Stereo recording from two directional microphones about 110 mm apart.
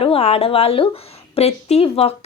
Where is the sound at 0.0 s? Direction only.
60° left (ahead or behind).